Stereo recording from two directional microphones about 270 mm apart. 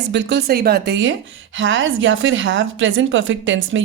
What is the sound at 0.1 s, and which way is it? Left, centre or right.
Speech, right.